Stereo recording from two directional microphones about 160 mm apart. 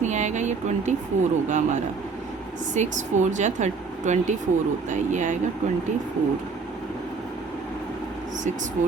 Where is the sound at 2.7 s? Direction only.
50° right (ahead or behind).